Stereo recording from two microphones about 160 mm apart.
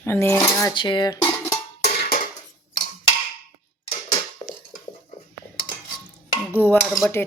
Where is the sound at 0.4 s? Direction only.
30° left (ahead or behind).